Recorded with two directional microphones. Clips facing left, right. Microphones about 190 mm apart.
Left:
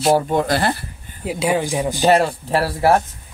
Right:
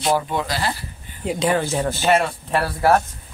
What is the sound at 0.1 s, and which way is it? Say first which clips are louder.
Speech: left 5 dB; 45° left (ahead or behind).